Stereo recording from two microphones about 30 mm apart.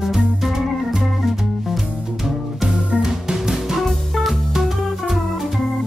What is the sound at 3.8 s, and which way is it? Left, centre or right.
Music, centre.